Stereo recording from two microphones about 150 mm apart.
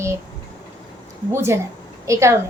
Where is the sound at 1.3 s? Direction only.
15° right (ahead or behind).